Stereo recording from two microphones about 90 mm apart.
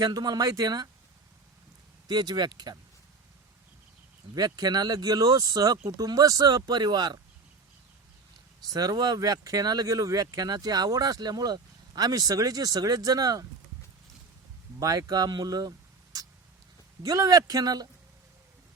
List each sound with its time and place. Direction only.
0.0 s speech: 45° right (ahead or behind)
2.0 s speech: 50° right (ahead or behind)
4.4 s speech: 45° right (ahead or behind)
8.6 s speech: 45° right (ahead or behind)
14.8 s speech: 40° right (ahead or behind)
16.1 s vehicle: 45° right (ahead or behind)
17.0 s speech: 40° right (ahead or behind)